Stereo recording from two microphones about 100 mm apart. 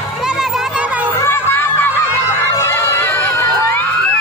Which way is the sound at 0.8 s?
15° right (ahead or behind).